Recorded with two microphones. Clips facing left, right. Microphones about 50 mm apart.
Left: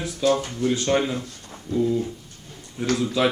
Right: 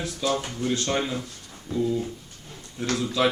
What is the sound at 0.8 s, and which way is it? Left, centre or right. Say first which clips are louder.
Speech: left 4 dB; centre.